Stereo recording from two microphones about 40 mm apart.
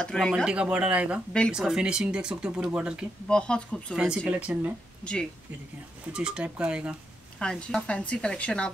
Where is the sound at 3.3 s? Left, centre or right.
Left.